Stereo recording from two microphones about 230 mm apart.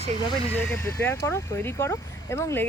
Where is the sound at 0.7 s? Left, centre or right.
Centre.